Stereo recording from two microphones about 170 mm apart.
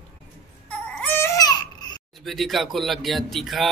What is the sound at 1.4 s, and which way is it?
Baby cry, 25° left (ahead or behind).